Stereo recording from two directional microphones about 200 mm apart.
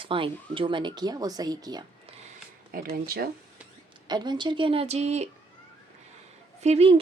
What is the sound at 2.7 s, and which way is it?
Speech, 50° right (ahead or behind).